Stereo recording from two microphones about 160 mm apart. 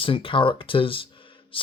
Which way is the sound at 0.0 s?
35° left (ahead or behind).